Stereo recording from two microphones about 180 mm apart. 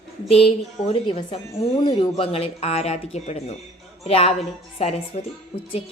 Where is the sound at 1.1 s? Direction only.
30° left (ahead or behind).